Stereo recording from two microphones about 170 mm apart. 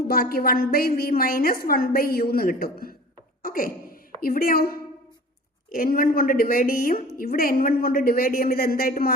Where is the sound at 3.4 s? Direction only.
55° left (ahead or behind).